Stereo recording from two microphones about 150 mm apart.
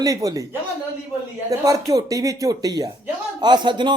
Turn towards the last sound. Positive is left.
turn(degrees=-30)  # may be behind; listen again after turning